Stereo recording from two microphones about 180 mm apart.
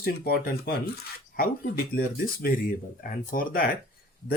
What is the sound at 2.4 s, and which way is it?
Speech, 50° left (ahead or behind).